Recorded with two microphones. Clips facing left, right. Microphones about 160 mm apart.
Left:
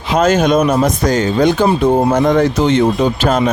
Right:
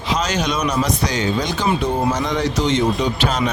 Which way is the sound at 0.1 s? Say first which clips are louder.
Left 9 dB; 50° left (ahead or behind).